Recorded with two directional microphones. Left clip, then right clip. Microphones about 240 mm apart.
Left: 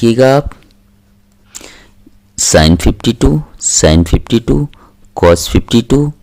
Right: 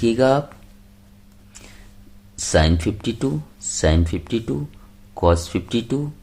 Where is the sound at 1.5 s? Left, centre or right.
Left.